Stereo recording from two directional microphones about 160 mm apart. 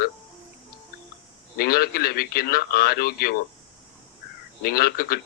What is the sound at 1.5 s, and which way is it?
A man's voice, 70° left (ahead or behind).